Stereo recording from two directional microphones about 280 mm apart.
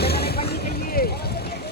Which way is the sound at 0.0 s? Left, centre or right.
Left.